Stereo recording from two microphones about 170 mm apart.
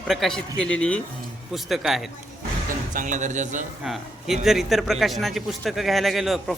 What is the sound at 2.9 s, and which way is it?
Speech, 45° right (ahead or behind).